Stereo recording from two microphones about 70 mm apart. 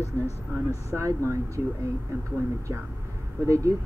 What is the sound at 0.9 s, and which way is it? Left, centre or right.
Speech, right.